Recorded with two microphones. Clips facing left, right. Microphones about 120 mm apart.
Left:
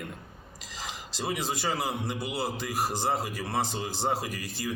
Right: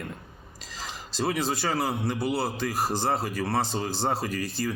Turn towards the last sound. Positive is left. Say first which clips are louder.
# right 5 dB
turn(degrees=15)  # may be behind; listen again after turning